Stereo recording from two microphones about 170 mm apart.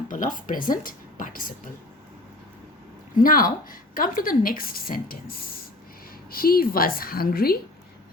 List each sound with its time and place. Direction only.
0.1 s speech: 50° left (ahead or behind)
3.2 s a woman's voice: 55° left (ahead or behind)